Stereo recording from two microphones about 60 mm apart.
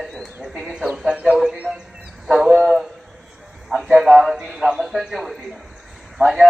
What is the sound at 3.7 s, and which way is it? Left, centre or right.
A man's voice, centre.